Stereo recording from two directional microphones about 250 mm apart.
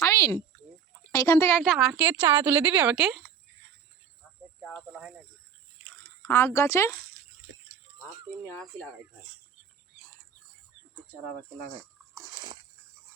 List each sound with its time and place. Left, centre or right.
0.0 s a sound: centre
1.1 s a woman's voice: centre
4.6 s speech: centre
6.2 s speech: centre
8.4 s a woman's voice: centre
12.1 s biting: centre